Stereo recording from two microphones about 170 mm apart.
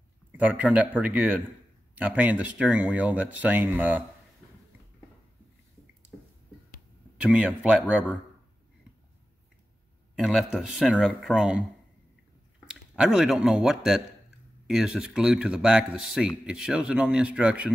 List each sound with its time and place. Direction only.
0.3 s speech: 10° right (ahead or behind)
7.2 s speech: 5° right (ahead or behind)
10.1 s speech: centre (ahead or behind)
12.9 s speech: 5° right (ahead or behind)